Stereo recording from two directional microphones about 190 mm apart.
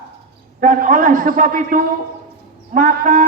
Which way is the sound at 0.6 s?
40° right (ahead or behind).